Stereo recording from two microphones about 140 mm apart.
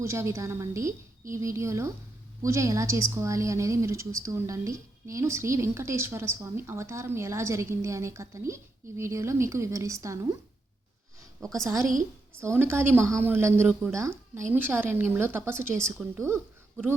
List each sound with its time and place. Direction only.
0.0 s a woman's voice: 20° right (ahead or behind)
11.3 s a woman's voice: 5° left (ahead or behind)
12.4 s a woman's voice: 20° right (ahead or behind)